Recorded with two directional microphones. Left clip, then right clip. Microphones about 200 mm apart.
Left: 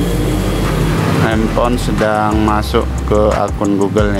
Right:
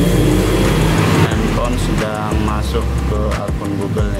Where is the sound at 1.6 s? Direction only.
30° left (ahead or behind).